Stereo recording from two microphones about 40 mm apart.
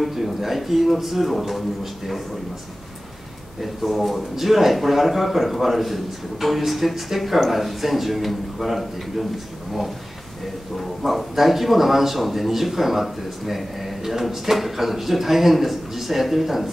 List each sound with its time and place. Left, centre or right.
0.0 s a man's voice: centre
3.6 s a man's voice: centre
10.8 s a man's voice: centre